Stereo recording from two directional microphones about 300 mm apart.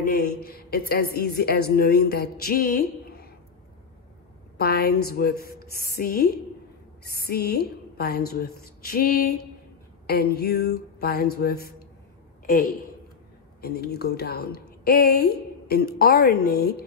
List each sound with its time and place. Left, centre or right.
0.0 s a woman's voice: left
4.6 s a woman's voice: left
13.6 s a woman's voice: left